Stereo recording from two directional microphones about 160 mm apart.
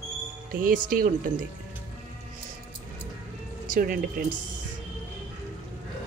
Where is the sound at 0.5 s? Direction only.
55° right (ahead or behind).